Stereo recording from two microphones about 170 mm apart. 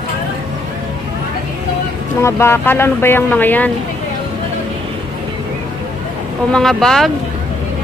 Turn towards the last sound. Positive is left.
turn(degrees=0)  # may be behind; listen again after turning